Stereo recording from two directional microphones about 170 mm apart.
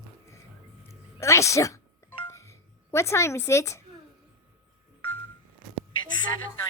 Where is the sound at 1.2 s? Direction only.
15° left (ahead or behind).